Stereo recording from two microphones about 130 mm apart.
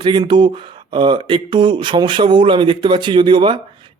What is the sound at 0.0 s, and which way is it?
Speech, 35° right (ahead or behind).